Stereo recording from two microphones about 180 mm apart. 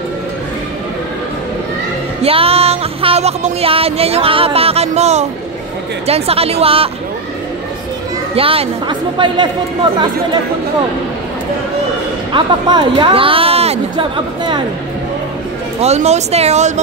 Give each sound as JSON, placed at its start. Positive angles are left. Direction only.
{"t": 2.2, "sound": "music", "side_deg": -30}
{"t": 6.0, "sound": "speech", "side_deg": -35}
{"t": 8.4, "sound": "speech", "side_deg": -30}
{"t": 12.3, "sound": "speech", "side_deg": -25}
{"t": 15.8, "sound": "speech", "side_deg": -35}